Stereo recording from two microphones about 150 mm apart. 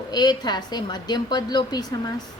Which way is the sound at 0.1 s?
25° left (ahead or behind).